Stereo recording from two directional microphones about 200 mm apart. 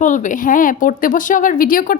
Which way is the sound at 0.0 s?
40° left (ahead or behind).